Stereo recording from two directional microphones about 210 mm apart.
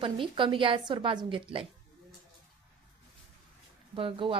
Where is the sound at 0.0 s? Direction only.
25° right (ahead or behind).